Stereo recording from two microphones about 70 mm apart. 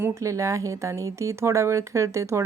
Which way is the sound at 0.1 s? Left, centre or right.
Right.